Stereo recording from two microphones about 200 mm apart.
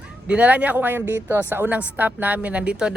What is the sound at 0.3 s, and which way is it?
Speech, 5° right (ahead or behind).